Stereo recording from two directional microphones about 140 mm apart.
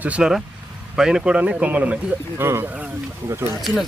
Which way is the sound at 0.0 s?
5° right (ahead or behind).